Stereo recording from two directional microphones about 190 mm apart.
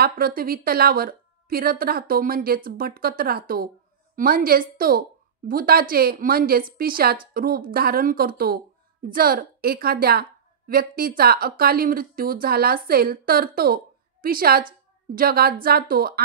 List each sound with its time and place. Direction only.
0.0 s a woman's voice: 55° right (ahead or behind)